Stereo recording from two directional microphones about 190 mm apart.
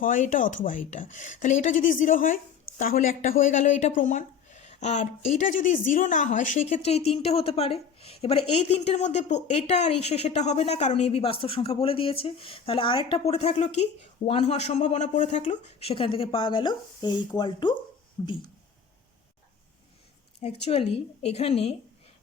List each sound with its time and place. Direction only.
0.0 s speech: 45° left (ahead or behind); by 18.3 s 25° left (ahead or behind)
20.4 s speech: 35° left (ahead or behind)